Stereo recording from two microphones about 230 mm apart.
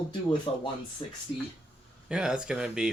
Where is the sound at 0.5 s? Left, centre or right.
Left.